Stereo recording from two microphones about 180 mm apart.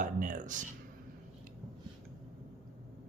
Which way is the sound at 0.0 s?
45° right (ahead or behind).